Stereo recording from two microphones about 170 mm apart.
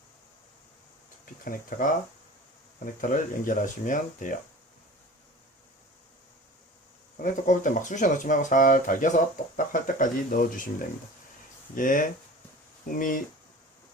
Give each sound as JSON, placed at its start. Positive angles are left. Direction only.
{"t": 1.2, "sound": "speech", "side_deg": 55}
{"t": 7.2, "sound": "speech", "side_deg": 50}